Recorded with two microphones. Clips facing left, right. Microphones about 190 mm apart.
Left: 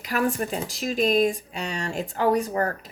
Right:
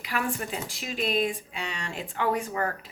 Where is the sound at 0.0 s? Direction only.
45° left (ahead or behind).